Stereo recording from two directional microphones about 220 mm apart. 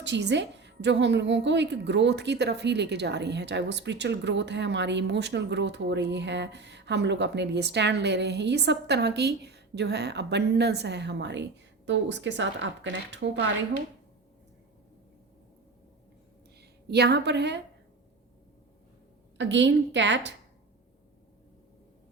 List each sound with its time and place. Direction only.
0.0 s a woman's voice: 50° right (ahead or behind)
16.6 s a woman's voice: 50° right (ahead or behind)
19.4 s a woman's voice: 55° right (ahead or behind)